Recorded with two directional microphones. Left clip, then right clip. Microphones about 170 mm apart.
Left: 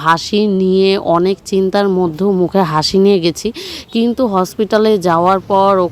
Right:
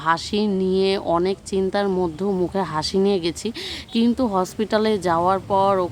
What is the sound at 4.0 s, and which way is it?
Speech, 30° left (ahead or behind).